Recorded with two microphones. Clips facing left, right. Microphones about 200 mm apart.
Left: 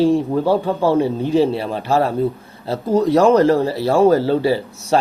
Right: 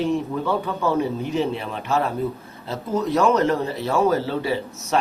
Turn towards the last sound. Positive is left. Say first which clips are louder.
# left 5 dB
turn(degrees=30)  # may be behind; listen again after turning